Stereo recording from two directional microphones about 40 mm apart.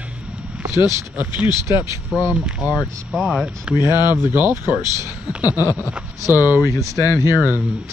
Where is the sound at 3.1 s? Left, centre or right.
Centre.